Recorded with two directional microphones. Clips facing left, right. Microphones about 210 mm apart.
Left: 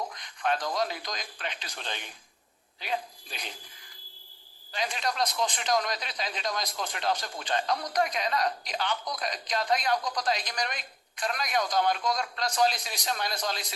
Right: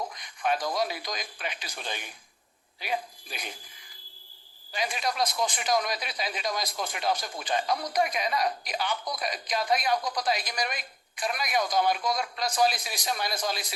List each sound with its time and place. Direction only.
0.1 s speech: 10° right (ahead or behind)
4.7 s speech: 10° right (ahead or behind)